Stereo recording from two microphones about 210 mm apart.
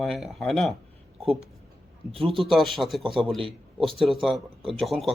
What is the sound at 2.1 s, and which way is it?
Speech, 25° right (ahead or behind).